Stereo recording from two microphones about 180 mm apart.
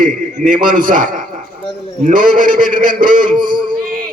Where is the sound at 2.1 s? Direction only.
50° right (ahead or behind).